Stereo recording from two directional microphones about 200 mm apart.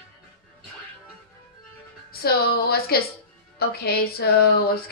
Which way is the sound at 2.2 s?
50° left (ahead or behind).